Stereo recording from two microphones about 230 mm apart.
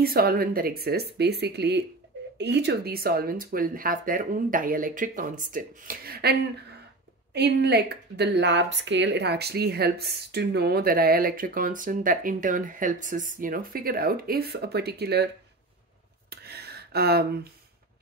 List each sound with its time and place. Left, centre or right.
0.0 s speech: right
7.3 s speech: right
16.3 s a sound: right